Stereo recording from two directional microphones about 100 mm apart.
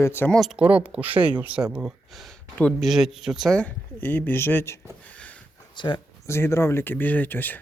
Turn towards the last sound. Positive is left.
turn(degrees=20)  # may be behind; listen again after turning